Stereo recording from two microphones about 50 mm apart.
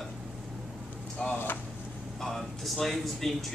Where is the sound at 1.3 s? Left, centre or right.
Left.